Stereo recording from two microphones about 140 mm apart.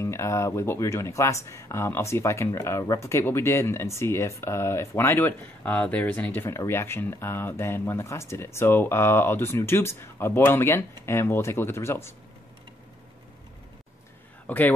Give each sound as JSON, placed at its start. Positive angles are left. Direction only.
{"t": 0.0, "sound": "speech", "side_deg": 20}
{"t": 14.5, "sound": "speech", "side_deg": 10}